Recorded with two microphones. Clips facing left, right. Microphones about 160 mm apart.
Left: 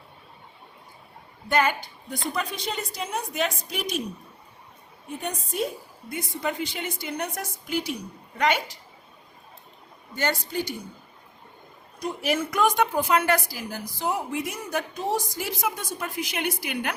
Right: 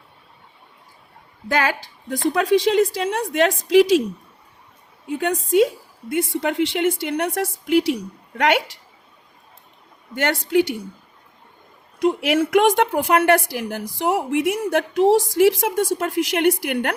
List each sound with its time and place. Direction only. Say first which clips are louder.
1.5 s a woman's voice: right 2 dB; 90° right
5.1 s a woman's voice: right 13 dB; 90° right
10.2 s a woman's voice: right 9 dB; 75° right (ahead or behind)
11.9 s a woman's voice: right 8 dB; 90° right; by 16.9 s 65° right (ahead or behind)